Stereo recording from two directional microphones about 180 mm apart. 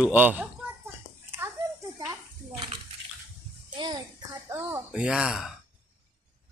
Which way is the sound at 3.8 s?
25° right (ahead or behind).